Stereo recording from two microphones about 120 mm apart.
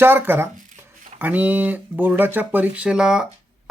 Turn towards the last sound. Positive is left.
turn(degrees=-5)  # may be behind; listen again after turning